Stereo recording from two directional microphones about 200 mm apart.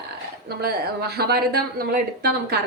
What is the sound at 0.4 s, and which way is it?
A woman's voice, 50° right (ahead or behind).